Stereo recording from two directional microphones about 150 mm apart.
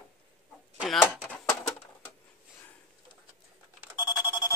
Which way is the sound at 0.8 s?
5° left (ahead or behind).